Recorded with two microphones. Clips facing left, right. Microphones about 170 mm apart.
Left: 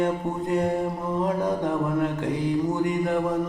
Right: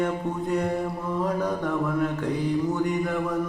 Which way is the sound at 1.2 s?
20° left (ahead or behind).